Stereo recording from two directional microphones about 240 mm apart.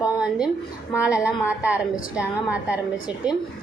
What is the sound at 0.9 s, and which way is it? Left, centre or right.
A woman's voice, centre.